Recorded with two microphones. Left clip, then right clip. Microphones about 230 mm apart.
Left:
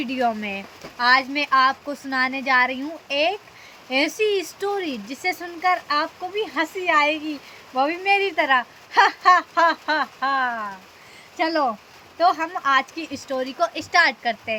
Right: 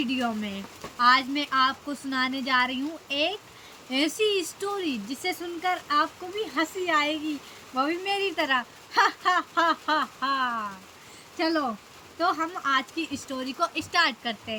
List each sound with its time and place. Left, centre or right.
0.0 s speech: centre